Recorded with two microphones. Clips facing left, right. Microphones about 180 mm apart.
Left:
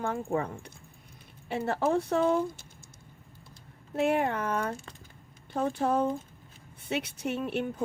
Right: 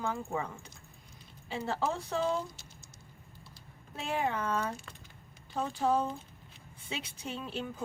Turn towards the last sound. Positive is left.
turn(degrees=60)  # may be behind; listen again after turning